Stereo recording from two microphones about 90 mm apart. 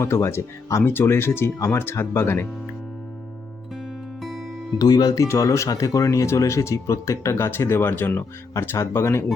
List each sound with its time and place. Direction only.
0.0 s speech: 30° left (ahead or behind)
4.2 s music: centre (ahead or behind)
4.8 s speech: 45° left (ahead or behind); by 9.2 s 30° left (ahead or behind)